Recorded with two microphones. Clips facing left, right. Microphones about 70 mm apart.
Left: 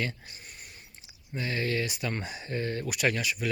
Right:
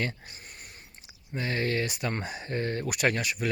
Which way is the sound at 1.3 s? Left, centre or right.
Right.